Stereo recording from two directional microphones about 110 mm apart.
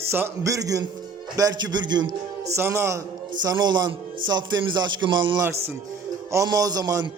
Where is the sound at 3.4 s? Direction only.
40° right (ahead or behind).